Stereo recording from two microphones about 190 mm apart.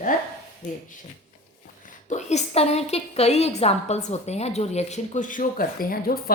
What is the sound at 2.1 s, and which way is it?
A woman's voice, 35° left (ahead or behind).